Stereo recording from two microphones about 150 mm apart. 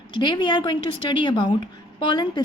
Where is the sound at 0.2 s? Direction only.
30° left (ahead or behind).